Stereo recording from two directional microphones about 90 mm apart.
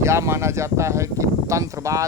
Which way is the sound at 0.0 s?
30° right (ahead or behind).